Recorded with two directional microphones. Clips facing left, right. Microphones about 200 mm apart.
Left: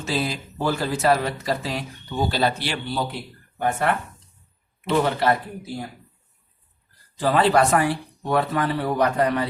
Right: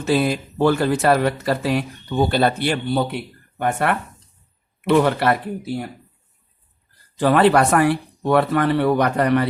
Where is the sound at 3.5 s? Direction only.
65° right (ahead or behind).